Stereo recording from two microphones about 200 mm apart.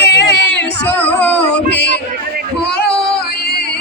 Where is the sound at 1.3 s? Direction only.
60° left (ahead or behind).